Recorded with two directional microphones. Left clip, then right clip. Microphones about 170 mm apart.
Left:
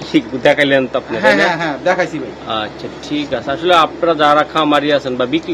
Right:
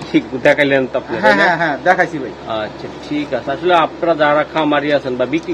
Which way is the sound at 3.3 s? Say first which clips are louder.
Left 2 dB; 25° left (ahead or behind).